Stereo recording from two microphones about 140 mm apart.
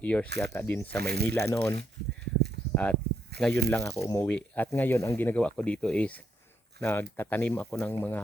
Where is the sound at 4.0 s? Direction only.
20° left (ahead or behind).